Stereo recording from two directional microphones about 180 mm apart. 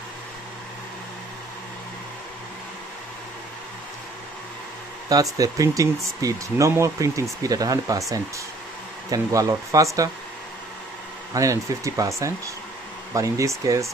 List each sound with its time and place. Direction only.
5.1 s speech: 20° right (ahead or behind)
9.1 s speech: 20° right (ahead or behind)
11.3 s speech: 15° right (ahead or behind)